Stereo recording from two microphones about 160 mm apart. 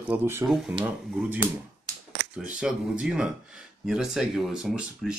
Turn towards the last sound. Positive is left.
turn(degrees=-5)  # may be behind; listen again after turning